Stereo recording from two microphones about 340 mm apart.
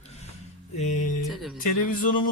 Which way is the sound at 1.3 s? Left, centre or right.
Centre.